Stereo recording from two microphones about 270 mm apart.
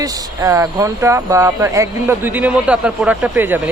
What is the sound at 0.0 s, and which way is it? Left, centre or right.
Speech, centre.